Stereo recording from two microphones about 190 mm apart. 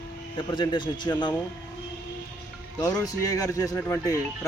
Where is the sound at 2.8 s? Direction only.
20° left (ahead or behind).